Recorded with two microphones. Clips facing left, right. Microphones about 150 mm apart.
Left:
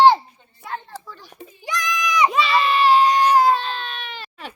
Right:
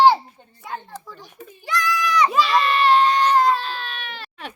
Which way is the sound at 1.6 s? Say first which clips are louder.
Right 2 dB; 15° left (ahead or behind).